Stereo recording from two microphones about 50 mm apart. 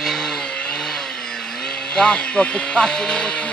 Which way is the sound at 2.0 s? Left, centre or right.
Left.